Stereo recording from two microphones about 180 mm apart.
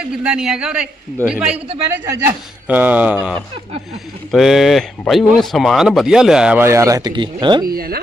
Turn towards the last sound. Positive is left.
turn(degrees=-55)  # may be behind; listen again after turning